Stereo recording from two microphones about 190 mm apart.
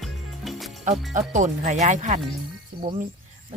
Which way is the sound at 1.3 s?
40° right (ahead or behind).